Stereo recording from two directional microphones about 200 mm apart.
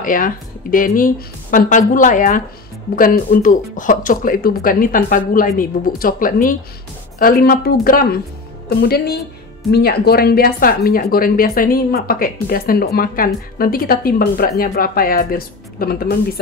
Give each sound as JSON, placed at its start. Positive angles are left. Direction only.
{"t": 0.0, "sound": "speech", "side_deg": 45}